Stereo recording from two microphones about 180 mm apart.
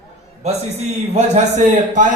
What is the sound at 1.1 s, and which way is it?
Speech, 40° right (ahead or behind).